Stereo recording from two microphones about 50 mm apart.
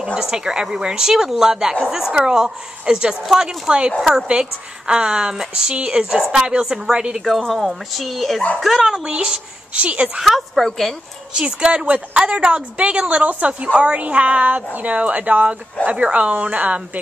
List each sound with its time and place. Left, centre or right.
0.0 s a woman's voice: centre
7.2 s speech: centre
8.9 s a woman's voice: right
10.2 s speech: centre
11.3 s a woman's voice: centre